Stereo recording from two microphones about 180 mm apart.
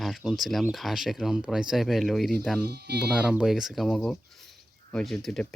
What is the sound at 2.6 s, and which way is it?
Speech, 65° right (ahead or behind).